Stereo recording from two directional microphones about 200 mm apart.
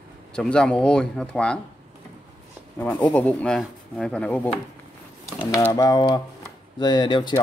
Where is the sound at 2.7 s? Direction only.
5° left (ahead or behind).